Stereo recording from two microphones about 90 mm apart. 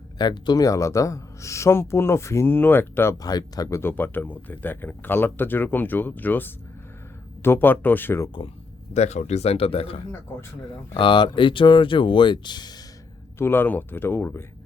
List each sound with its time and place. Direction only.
0.2 s speech: 55° left (ahead or behind); by 3.2 s 25° left (ahead or behind)
3.2 s speech: 45° left (ahead or behind)
3.8 s speech: 25° left (ahead or behind)
9.5 s speech: 90° left
10.9 s speech: 65° left (ahead or behind)
13.4 s speech: 25° left (ahead or behind)